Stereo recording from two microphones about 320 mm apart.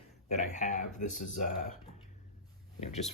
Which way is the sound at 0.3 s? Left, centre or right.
Left.